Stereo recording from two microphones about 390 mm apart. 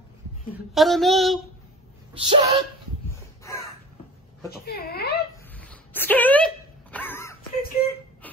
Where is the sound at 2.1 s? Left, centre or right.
Centre.